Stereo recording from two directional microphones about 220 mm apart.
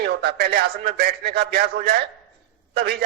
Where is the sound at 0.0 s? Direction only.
50° right (ahead or behind).